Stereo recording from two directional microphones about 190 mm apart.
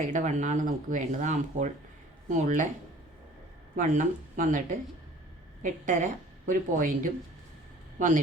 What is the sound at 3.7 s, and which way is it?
A woman's voice, 40° right (ahead or behind).